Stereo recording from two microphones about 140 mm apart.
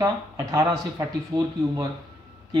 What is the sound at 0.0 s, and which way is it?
Speech, 25° right (ahead or behind).